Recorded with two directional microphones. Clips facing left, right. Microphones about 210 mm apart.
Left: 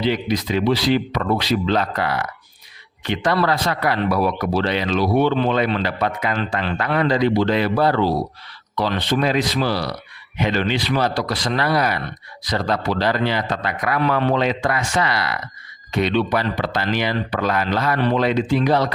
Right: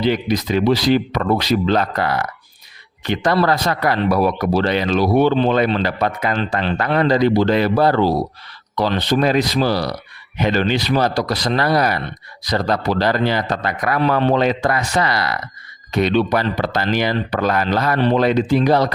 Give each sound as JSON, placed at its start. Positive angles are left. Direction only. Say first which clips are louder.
{"t": 0.0, "sound": "speech", "louder": "right 2 dB", "side_deg": -45}
{"t": 14.3, "sound": "speech", "louder": "right 3 dB", "side_deg": -40}